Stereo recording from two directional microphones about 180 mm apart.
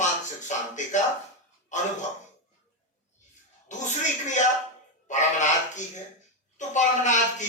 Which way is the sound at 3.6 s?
45° left (ahead or behind).